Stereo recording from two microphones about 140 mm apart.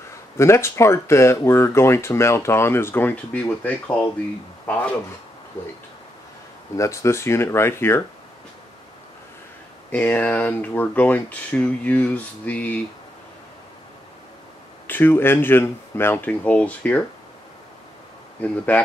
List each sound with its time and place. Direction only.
0.4 s speech: 20° left (ahead or behind)
6.8 s speech: 20° left (ahead or behind)
9.8 s speech: 10° left (ahead or behind)
14.9 s speech: 15° left (ahead or behind)